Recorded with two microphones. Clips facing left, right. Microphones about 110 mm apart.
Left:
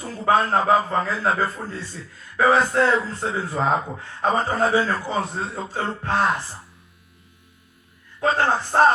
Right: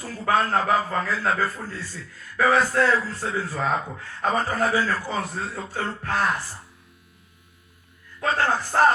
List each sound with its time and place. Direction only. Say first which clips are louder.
0.0 s a man's voice: left 3 dB; 25° left (ahead or behind)
8.2 s a man's voice: left 3 dB; 25° left (ahead or behind)